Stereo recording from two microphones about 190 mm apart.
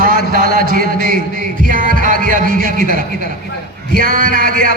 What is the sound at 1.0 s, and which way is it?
Music, 45° right (ahead or behind).